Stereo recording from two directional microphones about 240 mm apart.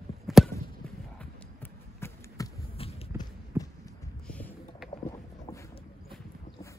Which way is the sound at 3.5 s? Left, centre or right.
Centre.